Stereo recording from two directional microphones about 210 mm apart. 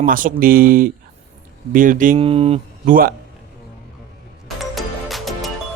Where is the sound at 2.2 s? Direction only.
30° right (ahead or behind).